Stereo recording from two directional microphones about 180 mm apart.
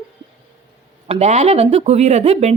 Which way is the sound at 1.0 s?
35° right (ahead or behind).